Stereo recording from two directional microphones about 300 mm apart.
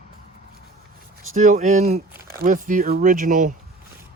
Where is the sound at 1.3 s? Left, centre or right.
Right.